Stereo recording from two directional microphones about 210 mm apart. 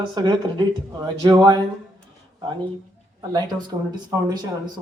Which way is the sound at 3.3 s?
20° right (ahead or behind).